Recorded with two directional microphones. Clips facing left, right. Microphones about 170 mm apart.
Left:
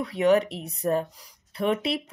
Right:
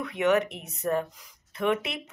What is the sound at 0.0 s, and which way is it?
Speech, 35° left (ahead or behind).